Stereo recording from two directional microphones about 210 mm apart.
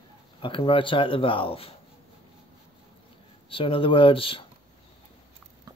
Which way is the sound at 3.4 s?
25° left (ahead or behind).